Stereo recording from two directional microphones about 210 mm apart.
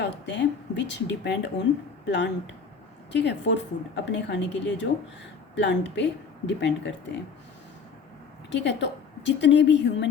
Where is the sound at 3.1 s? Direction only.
55° left (ahead or behind).